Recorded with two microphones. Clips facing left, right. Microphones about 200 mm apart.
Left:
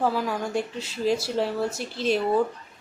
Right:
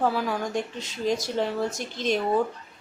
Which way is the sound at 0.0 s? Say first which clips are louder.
Even; centre (ahead or behind).